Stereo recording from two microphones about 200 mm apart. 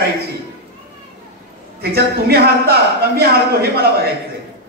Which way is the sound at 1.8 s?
50° right (ahead or behind).